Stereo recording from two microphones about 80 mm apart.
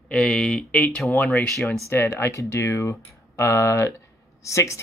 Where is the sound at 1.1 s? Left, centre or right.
Left.